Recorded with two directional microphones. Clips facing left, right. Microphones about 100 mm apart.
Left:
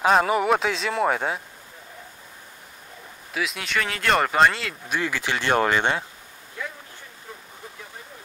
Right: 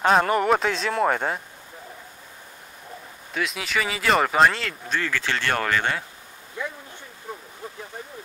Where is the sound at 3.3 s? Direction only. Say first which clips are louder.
Even; centre (ahead or behind).